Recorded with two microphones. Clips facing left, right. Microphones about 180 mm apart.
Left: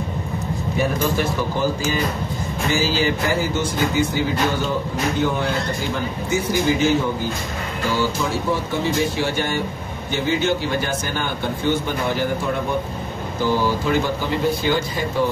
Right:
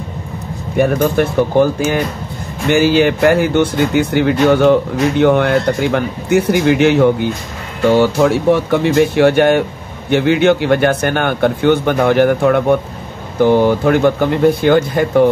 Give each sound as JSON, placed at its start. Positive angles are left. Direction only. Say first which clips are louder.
{"t": 0.7, "sound": "a man's voice", "louder": "right 9 dB", "side_deg": -60}